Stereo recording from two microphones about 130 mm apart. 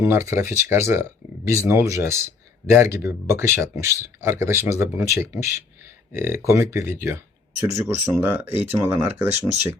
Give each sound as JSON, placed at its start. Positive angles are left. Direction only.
{"t": 0.0, "sound": "speech", "side_deg": -20}